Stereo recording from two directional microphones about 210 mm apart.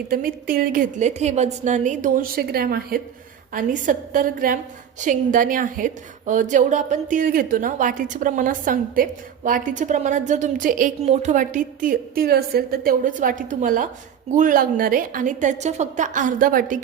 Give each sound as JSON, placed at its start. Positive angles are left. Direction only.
{"t": 0.1, "sound": "a woman's voice", "side_deg": -45}